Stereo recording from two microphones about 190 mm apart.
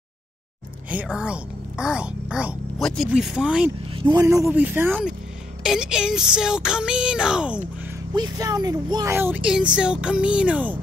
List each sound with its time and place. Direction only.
0.8 s a woman's voice: 5° right (ahead or behind)
3.9 s a woman's voice: 20° right (ahead or behind); by 7.6 s 5° right (ahead or behind)
8.1 s speech: 20° right (ahead or behind)